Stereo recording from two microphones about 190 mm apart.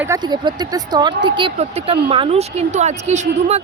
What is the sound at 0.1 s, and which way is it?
Speech, 20° right (ahead or behind).